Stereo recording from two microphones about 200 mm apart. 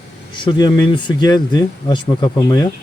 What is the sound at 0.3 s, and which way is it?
Speech, 20° left (ahead or behind).